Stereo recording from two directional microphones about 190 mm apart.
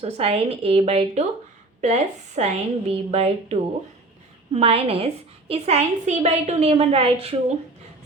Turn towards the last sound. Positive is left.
turn(degrees=-30)  # may be behind; listen again after turning